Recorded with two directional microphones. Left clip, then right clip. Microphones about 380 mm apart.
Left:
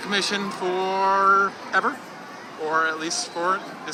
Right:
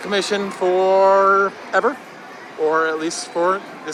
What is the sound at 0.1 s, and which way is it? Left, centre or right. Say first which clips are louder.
Speech: right 4 dB; centre.